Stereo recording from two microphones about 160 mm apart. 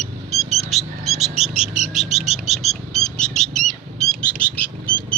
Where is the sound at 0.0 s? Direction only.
Centre (ahead or behind).